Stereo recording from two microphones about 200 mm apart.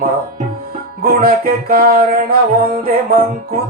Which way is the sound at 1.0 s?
45° right (ahead or behind).